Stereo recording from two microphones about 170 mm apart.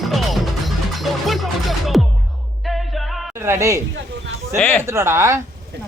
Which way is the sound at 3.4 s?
15° right (ahead or behind).